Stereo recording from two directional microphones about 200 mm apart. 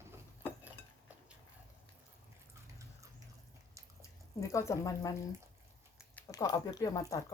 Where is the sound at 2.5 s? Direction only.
15° right (ahead or behind).